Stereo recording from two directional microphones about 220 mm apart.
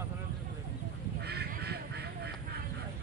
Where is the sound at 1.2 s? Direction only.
45° right (ahead or behind).